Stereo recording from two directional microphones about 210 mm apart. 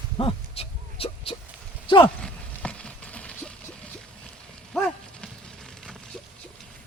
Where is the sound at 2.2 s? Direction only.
5° left (ahead or behind).